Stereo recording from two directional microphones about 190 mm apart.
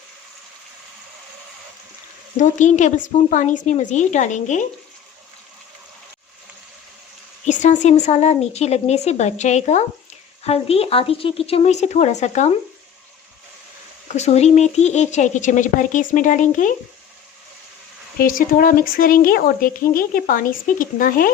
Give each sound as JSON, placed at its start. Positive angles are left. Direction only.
{"t": 2.4, "sound": "speech", "side_deg": 40}
{"t": 7.4, "sound": "speech", "side_deg": 40}
{"t": 14.1, "sound": "speech", "side_deg": 35}
{"t": 18.2, "sound": "speech", "side_deg": 50}